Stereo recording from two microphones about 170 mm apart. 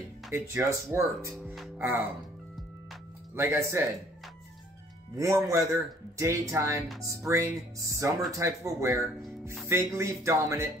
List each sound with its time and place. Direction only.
0.3 s speech: 15° right (ahead or behind)
1.4 s music: centre (ahead or behind)
1.8 s speech: 5° right (ahead or behind)
3.3 s speech: 15° right (ahead or behind)
5.1 s speech: 20° right (ahead or behind)